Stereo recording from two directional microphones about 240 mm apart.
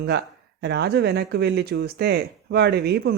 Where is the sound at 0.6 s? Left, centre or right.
Right.